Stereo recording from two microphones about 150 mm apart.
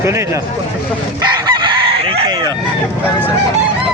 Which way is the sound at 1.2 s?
30° right (ahead or behind).